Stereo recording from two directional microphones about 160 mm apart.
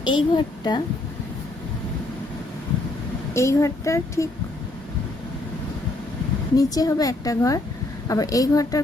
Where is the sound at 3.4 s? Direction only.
20° left (ahead or behind).